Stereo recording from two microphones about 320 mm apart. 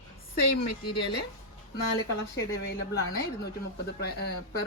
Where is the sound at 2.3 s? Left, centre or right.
Left.